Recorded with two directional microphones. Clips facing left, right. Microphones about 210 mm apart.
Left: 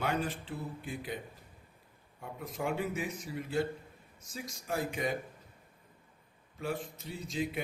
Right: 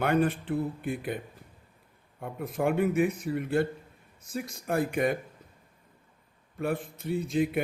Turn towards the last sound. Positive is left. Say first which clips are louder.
# right 9 dB
turn(degrees=-55)  # may be behind; listen again after turning